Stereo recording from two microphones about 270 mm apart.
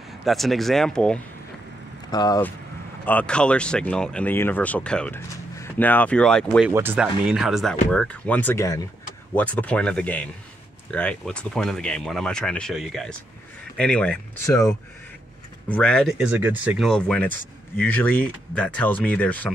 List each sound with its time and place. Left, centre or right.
0.2 s speech: centre
2.0 s speech: centre
6.7 s speech: centre